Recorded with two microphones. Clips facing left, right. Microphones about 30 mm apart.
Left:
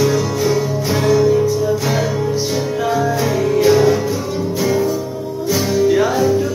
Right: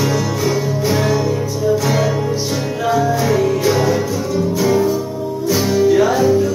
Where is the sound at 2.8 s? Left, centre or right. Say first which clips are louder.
Right 2 dB; centre.